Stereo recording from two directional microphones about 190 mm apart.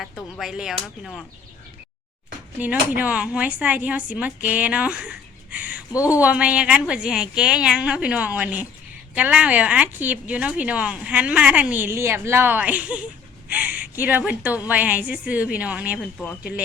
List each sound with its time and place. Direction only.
0.0 s a woman's voice: centre (ahead or behind)
2.6 s speech: 10° right (ahead or behind)
5.9 s speech: 15° left (ahead or behind)
6.1 s a woman's voice: 5° right (ahead or behind)
16.1 s speech: 10° left (ahead or behind)